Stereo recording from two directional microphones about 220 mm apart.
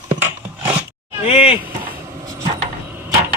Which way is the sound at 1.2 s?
25° left (ahead or behind).